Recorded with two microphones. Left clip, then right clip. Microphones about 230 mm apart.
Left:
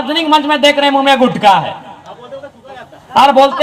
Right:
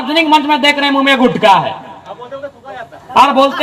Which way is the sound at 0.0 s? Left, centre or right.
Left.